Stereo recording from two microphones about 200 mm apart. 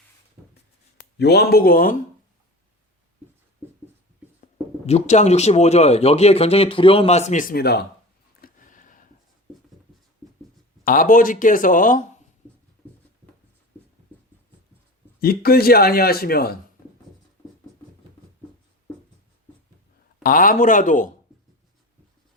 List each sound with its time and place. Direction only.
1.2 s a man's voice: 55° left (ahead or behind)
4.9 s speech: 35° left (ahead or behind); by 7.8 s 50° left (ahead or behind)
8.4 s a sound: 45° left (ahead or behind)
10.8 s a man's voice: 45° left (ahead or behind)
15.2 s a man's voice: 50° left (ahead or behind)
20.2 s speech: 45° left (ahead or behind)